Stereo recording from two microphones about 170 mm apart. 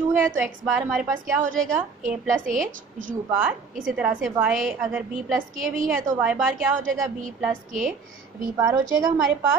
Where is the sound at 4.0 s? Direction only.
5° right (ahead or behind).